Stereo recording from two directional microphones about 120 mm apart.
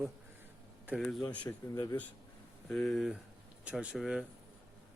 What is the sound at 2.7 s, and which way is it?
Speech, 5° left (ahead or behind).